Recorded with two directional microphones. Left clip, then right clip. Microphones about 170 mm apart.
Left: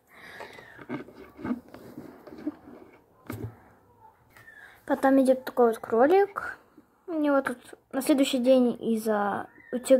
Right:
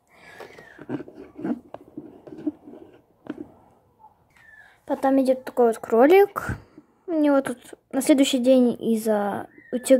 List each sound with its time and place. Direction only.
0.1 s a sound: 5° right (ahead or behind)
4.8 s speech: 5° right (ahead or behind); by 6.6 s 50° right (ahead or behind)
7.1 s speech: 35° right (ahead or behind)